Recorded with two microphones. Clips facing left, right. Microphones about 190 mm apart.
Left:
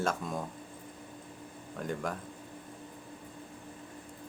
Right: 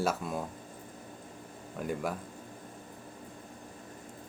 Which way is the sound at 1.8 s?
5° right (ahead or behind).